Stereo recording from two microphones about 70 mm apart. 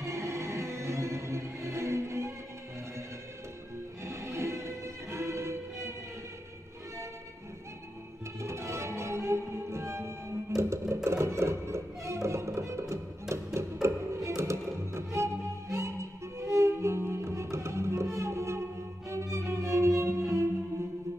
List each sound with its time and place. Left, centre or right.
0.0 s music: right
4.0 s music: right
8.4 s music: right